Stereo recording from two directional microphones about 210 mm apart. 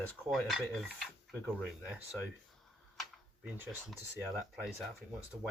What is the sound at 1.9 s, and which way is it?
Speech, 5° right (ahead or behind).